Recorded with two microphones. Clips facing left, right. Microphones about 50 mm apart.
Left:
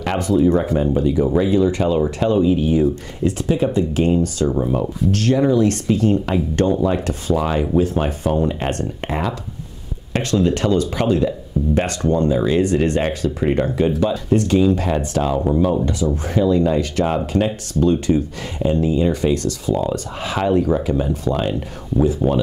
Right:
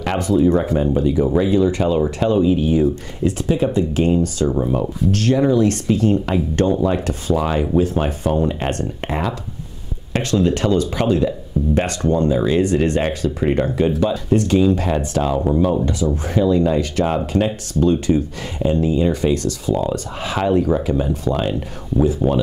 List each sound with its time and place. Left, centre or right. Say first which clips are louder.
0.0 s speech: even; right